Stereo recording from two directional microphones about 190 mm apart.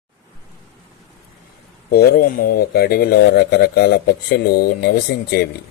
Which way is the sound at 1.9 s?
55° left (ahead or behind).